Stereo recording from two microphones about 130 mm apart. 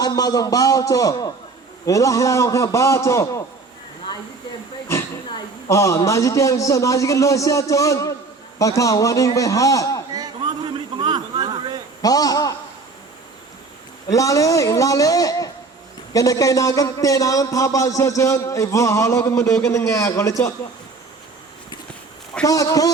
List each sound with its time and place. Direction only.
0.0 s speech: 30° left (ahead or behind)
5.6 s speech: 20° left (ahead or behind)
10.1 s a sound: 30° right (ahead or behind)
12.0 s speech: 30° left (ahead or behind)
14.1 s speech: 25° left (ahead or behind)
22.4 s speech: 25° left (ahead or behind)